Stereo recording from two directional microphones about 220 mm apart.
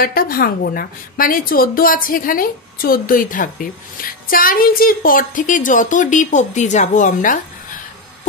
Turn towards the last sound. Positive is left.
turn(degrees=35)  # may be behind; listen again after turning